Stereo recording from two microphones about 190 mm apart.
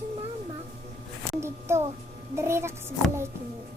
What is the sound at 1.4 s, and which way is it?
A child's voice, 15° right (ahead or behind).